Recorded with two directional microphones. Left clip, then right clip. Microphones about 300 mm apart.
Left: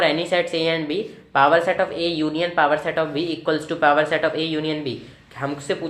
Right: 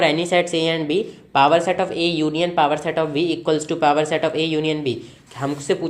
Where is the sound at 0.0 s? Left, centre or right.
Right.